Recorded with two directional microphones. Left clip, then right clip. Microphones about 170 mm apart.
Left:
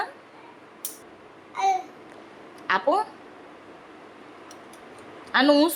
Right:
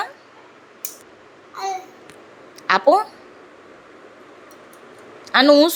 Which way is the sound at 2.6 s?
25° right (ahead or behind).